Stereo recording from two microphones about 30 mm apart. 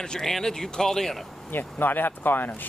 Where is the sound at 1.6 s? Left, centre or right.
Left.